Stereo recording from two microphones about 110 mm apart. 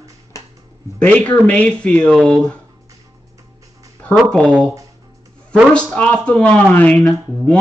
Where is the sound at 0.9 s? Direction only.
10° left (ahead or behind).